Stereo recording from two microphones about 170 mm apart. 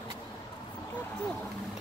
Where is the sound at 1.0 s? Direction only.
10° left (ahead or behind).